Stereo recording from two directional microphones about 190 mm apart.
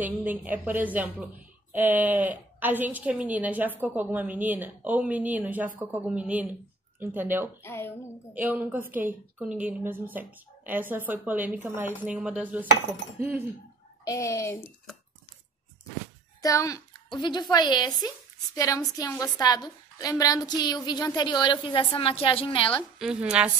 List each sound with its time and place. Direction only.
0.0 s speech: 10° right (ahead or behind)
7.6 s a woman's voice: 10° left (ahead or behind)
8.4 s speech: 10° right (ahead or behind)
14.0 s a woman's voice: 15° left (ahead or behind)
16.3 s a woman's voice: 15° left (ahead or behind)
22.9 s a woman's voice: 5° right (ahead or behind)